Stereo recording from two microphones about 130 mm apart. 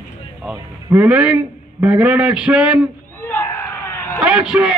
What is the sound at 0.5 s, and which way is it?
A man's voice, 15° right (ahead or behind).